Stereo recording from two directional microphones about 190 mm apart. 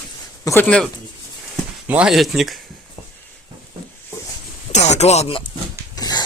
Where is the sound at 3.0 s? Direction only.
30° left (ahead or behind).